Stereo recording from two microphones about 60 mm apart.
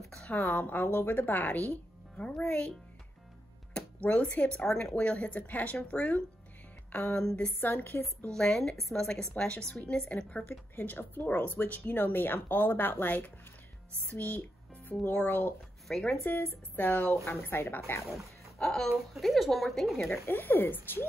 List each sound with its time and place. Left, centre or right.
0.5 s a woman's voice: left
2.1 s speech: centre
3.7 s speech: centre
6.9 s a sound: left
7.2 s speech: centre
7.6 s a woman's voice: left
8.4 s speech: centre
10.8 s a woman's voice: left
15.9 s speech: centre
16.3 s a woman's voice: left
17.1 s a woman's voice: left
18.1 s speech: centre
20.1 s a woman's voice: left